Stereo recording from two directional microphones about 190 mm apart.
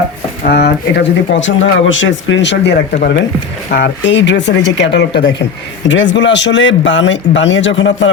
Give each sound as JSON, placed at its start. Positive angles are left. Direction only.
{"t": 0.4, "sound": "a man's voice", "side_deg": 60}